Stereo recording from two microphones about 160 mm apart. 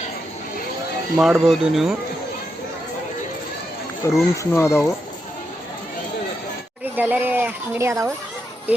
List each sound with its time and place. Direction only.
1.2 s speech: centre (ahead or behind)
4.0 s speech: 15° left (ahead or behind)
6.9 s speech: 10° right (ahead or behind)